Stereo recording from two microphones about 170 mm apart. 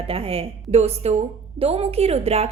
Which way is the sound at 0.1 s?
35° right (ahead or behind).